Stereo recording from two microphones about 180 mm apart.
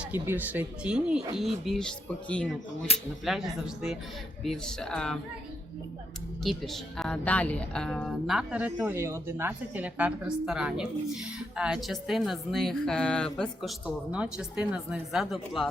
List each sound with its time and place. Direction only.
0.0 s a woman's voice: 10° right (ahead or behind); by 2.6 s 5° left (ahead or behind)
2.9 s speech: 35° left (ahead or behind)
3.2 s a woman's voice: centre (ahead or behind)
6.4 s a woman's voice: centre (ahead or behind)